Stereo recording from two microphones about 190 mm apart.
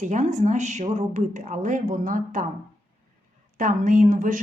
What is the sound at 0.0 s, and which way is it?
Speech, 40° right (ahead or behind).